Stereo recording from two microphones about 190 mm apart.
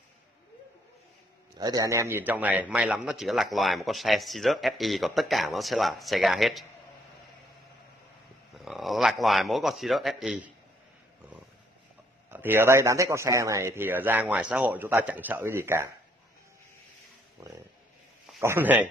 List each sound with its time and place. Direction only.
1.6 s speech: 20° right (ahead or behind); by 6.6 s centre (ahead or behind)
8.6 s a man's voice: centre (ahead or behind)
12.3 s a man's voice: 10° right (ahead or behind)
17.4 s a man's voice: 15° right (ahead or behind)